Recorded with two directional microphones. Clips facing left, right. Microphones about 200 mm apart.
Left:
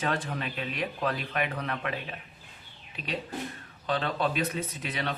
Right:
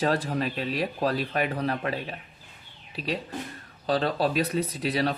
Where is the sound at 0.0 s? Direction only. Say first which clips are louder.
Right 6 dB; 35° right (ahead or behind).